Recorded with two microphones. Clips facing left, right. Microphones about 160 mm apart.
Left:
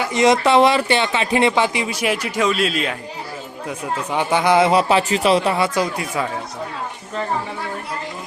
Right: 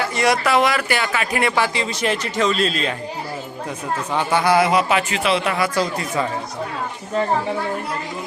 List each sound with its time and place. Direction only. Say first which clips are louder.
0.0 s speech: left 4 dB; 20° left (ahead or behind)
4.1 s speech: left 1 dB; 15° left (ahead or behind)
5.8 s speech: even; 10° left (ahead or behind)